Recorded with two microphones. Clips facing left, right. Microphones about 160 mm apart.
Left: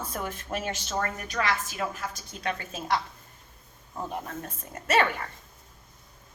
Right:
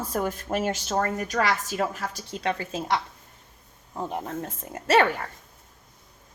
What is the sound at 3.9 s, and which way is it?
Speech, 25° right (ahead or behind).